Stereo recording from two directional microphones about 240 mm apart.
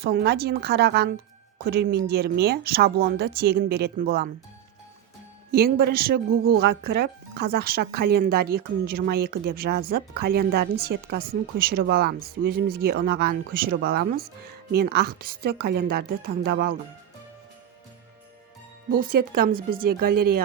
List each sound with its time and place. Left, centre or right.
0.0 s a woman's voice: right
5.5 s speech: right
18.9 s speech: right